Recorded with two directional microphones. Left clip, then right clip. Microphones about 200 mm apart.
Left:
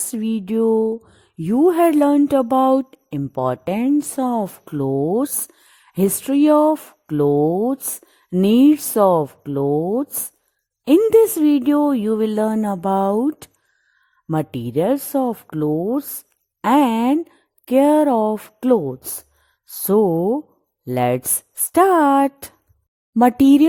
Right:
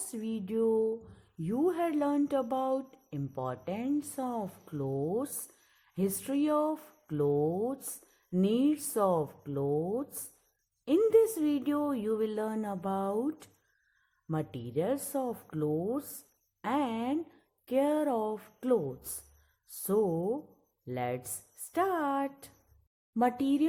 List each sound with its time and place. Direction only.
0.1 s speech: 45° left (ahead or behind)